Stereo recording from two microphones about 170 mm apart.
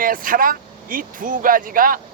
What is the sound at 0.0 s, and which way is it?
Speech, 55° right (ahead or behind).